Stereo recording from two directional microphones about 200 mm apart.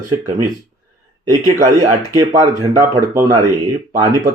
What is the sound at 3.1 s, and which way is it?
Speech, 10° right (ahead or behind).